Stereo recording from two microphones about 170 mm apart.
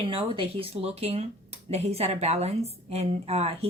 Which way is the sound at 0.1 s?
30° right (ahead or behind).